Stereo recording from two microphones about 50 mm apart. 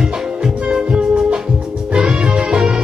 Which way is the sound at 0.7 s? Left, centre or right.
Centre.